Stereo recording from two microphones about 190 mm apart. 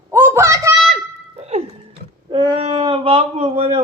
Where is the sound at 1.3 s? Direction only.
35° right (ahead or behind).